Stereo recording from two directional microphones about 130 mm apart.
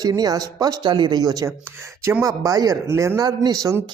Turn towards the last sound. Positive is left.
turn(degrees=-30)  # may be behind; listen again after turning